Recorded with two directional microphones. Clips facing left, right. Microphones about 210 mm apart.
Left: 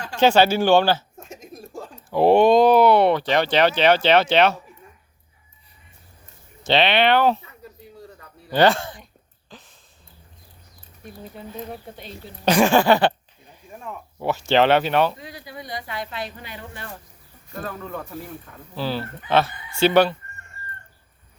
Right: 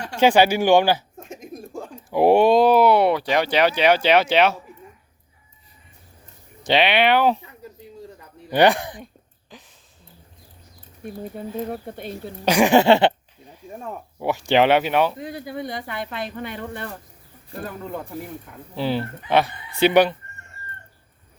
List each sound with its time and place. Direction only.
0.2 s speech: 15° right (ahead or behind)
1.3 s a sound: 55° right (ahead or behind)
1.7 s speech: 15° right (ahead or behind)
6.6 s speech: 15° right (ahead or behind)
8.4 s speech: 15° right (ahead or behind)
9.5 s a sound: 15° right (ahead or behind)
11.0 s speech: 50° right (ahead or behind)
12.5 s speech: 15° right (ahead or behind)
13.7 s speech: 35° right (ahead or behind)
14.2 s speech: 15° right (ahead or behind)
15.2 s speech: 50° right (ahead or behind)
17.6 s speech: 15° right (ahead or behind)